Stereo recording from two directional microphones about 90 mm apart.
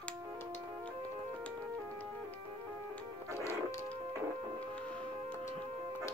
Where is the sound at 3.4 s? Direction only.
35° left (ahead or behind).